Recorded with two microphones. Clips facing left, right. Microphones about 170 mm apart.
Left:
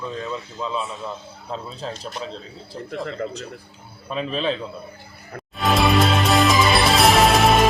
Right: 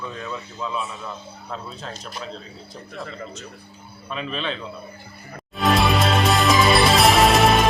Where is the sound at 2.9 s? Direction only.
70° left (ahead or behind).